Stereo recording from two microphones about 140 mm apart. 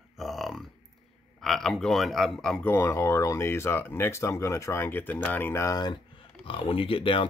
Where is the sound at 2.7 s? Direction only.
20° left (ahead or behind).